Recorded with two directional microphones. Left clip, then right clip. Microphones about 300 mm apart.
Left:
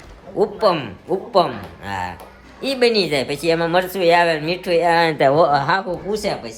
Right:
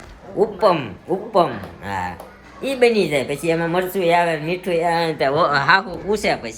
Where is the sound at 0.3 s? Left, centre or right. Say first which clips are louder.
Right 1 dB; centre.